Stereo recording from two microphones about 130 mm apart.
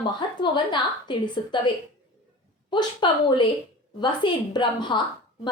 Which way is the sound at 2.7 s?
35° left (ahead or behind).